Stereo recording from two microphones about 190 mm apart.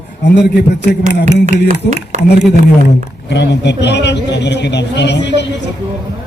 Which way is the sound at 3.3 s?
65° left (ahead or behind).